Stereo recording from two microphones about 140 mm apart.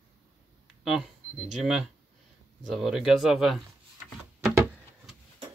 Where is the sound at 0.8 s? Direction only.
5° right (ahead or behind).